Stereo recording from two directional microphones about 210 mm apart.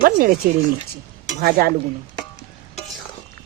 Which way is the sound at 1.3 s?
45° right (ahead or behind).